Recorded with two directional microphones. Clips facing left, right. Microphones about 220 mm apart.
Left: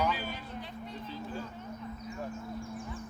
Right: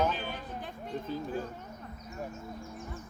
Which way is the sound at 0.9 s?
50° right (ahead or behind).